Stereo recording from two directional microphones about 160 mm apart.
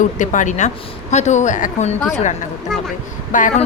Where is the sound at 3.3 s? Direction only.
55° left (ahead or behind).